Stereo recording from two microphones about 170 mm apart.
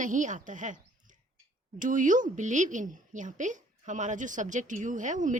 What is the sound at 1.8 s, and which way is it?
A woman's voice, 50° right (ahead or behind).